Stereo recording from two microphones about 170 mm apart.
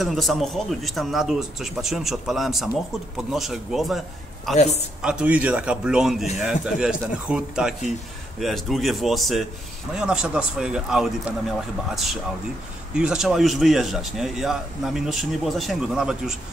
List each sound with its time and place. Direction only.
0.0 s speech: centre (ahead or behind)
4.6 s a woman's voice: 40° left (ahead or behind)
5.0 s speech: 5° right (ahead or behind)